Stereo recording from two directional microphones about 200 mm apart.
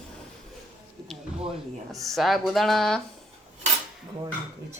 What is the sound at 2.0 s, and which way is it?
A woman's voice, centre (ahead or behind).